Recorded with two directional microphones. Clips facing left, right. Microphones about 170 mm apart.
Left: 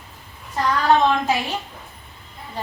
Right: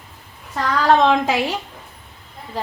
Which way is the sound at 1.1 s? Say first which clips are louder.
Right 3 dB; 90° right.